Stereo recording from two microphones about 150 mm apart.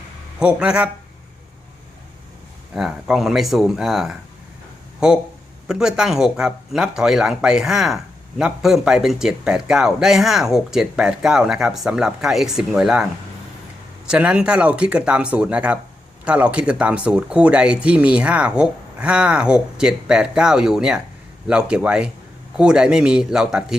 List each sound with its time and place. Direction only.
0.3 s speech: 5° right (ahead or behind)
2.7 s speech: centre (ahead or behind)
14.1 s speech: 10° right (ahead or behind)